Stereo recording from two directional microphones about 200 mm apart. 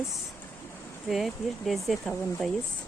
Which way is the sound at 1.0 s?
Centre (ahead or behind).